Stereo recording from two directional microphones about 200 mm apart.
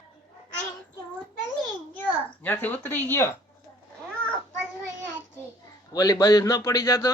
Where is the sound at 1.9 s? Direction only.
10° left (ahead or behind).